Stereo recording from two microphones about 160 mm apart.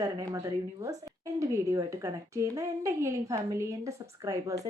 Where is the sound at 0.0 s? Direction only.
20° right (ahead or behind).